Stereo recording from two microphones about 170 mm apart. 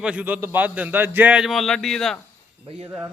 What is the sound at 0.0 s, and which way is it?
A man's voice, 5° right (ahead or behind).